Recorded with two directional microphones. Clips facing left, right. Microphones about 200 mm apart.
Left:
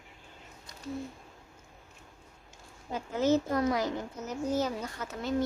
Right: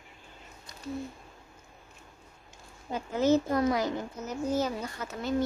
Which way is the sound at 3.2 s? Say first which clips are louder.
Right 2 dB; 15° right (ahead or behind).